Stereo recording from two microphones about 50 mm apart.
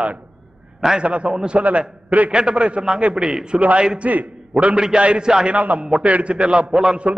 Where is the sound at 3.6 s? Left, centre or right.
Right.